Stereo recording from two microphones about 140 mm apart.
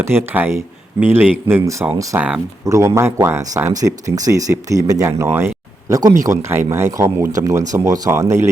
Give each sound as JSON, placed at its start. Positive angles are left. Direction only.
{"t": 0.0, "sound": "speech", "side_deg": -15}
{"t": 2.6, "sound": "speech", "side_deg": -20}